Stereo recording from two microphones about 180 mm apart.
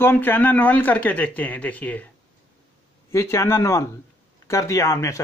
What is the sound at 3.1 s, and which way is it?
A man's voice, 15° left (ahead or behind).